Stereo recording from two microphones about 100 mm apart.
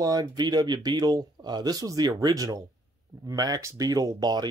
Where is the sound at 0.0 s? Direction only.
40° right (ahead or behind).